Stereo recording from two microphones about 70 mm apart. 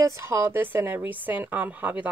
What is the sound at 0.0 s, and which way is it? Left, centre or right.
A woman's voice, right.